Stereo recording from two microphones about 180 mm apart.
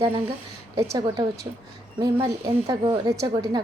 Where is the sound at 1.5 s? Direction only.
20° right (ahead or behind).